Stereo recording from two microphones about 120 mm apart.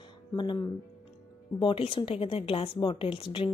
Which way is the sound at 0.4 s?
40° left (ahead or behind).